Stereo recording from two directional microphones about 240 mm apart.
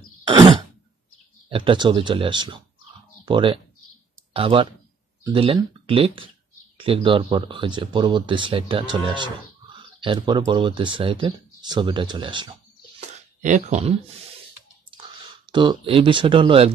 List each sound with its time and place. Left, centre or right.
0.3 s throat clearing: centre
1.5 s speech: right
13.4 s speech: right
15.5 s speech: centre